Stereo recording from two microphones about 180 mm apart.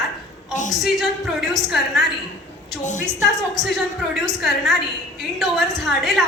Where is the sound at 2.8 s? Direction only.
40° left (ahead or behind).